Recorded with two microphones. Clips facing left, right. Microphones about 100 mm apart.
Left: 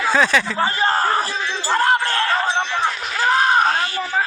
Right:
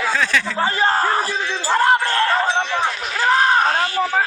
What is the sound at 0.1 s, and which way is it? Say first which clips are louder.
Speech: left 5 dB; 20° left (ahead or behind).